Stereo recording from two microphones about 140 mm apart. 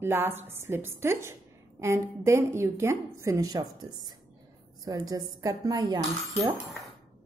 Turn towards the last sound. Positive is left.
turn(degrees=-25)  # may be behind; listen again after turning